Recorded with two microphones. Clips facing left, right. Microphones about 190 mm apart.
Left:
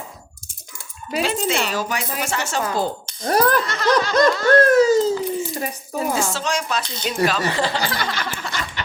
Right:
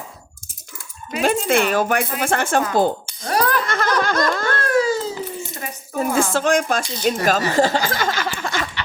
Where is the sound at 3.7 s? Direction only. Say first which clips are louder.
Left 1 dB; 50° right (ahead or behind).